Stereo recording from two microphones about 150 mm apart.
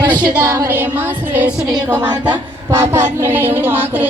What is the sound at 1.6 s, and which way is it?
A woman's voice, 25° right (ahead or behind).